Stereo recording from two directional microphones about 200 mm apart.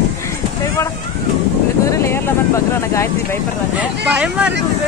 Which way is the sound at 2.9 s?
15° left (ahead or behind).